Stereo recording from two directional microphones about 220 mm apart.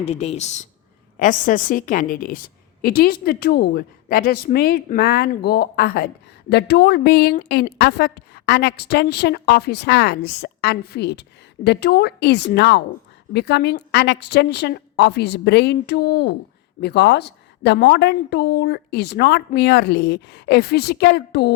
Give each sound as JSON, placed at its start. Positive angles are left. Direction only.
{"t": 0.0, "sound": "speech", "side_deg": 30}